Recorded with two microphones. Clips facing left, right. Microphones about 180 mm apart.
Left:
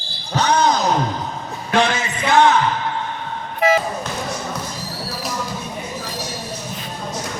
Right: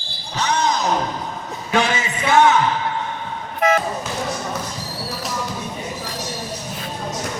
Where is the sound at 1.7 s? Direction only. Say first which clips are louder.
Left 2 dB; 5° right (ahead or behind).